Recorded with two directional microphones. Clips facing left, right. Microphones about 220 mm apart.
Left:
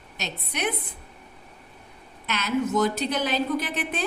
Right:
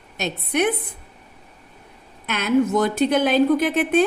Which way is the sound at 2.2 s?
55° right (ahead or behind).